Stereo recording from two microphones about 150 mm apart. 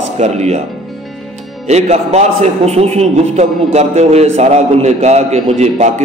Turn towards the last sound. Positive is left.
turn(degrees=-50)  # may be behind; listen again after turning